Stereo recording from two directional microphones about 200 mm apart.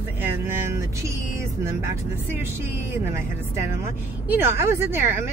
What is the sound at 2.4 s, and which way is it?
Speech, 10° right (ahead or behind).